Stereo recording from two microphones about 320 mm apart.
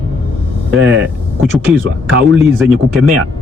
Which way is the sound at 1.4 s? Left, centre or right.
Centre.